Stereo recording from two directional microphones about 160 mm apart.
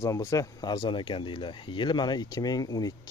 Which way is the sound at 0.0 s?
20° left (ahead or behind).